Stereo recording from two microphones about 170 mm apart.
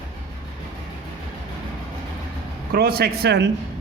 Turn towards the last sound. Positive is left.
turn(degrees=-80)